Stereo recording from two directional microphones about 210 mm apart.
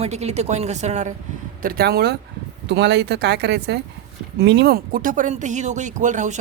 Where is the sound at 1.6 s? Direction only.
45° right (ahead or behind).